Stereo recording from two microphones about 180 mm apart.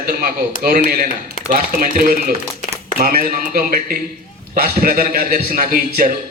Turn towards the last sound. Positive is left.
turn(degrees=-50)  # may be behind; listen again after turning